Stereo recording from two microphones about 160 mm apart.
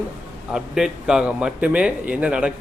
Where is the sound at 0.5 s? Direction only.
5° right (ahead or behind).